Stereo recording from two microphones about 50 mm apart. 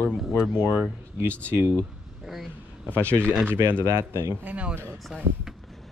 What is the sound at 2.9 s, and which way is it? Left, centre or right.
Speech, left.